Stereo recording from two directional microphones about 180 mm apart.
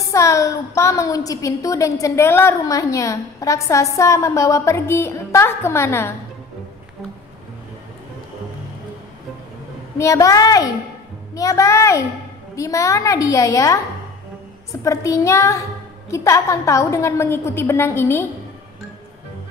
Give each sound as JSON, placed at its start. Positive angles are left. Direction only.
{"t": 0.0, "sound": "a woman's voice", "side_deg": 15}
{"t": 9.9, "sound": "a woman's voice", "side_deg": 15}
{"t": 14.8, "sound": "a woman's voice", "side_deg": 15}